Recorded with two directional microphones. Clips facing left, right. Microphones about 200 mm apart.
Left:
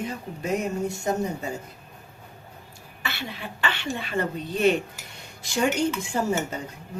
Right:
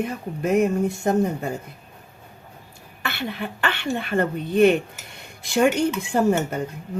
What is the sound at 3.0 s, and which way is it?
Speech, 55° right (ahead or behind).